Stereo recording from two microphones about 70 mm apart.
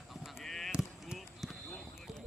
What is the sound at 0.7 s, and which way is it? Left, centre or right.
Basketball bounce, centre.